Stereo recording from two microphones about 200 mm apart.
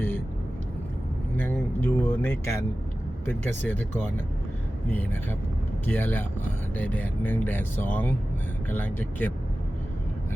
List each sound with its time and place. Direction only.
1.4 s speech: 10° left (ahead or behind)
4.9 s speech: 10° left (ahead or behind)